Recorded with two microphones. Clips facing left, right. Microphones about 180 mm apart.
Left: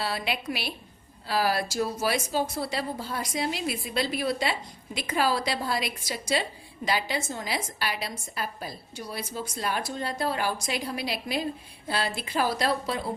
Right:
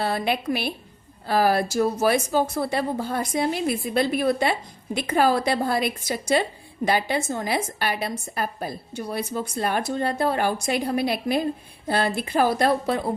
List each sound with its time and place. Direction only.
0.0 s a woman's voice: 50° right (ahead or behind)